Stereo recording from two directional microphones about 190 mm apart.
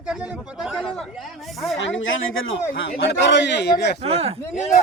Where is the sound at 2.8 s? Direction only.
70° left (ahead or behind).